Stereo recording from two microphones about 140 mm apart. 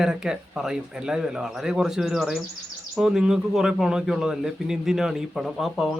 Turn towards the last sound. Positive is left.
turn(degrees=0)  # may be behind; listen again after turning